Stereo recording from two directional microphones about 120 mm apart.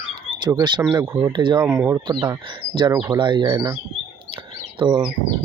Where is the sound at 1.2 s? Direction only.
40° right (ahead or behind).